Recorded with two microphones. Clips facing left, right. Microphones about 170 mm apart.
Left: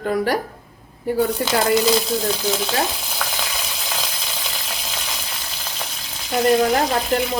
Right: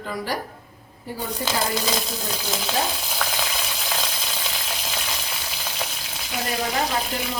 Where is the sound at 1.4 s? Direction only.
65° left (ahead or behind).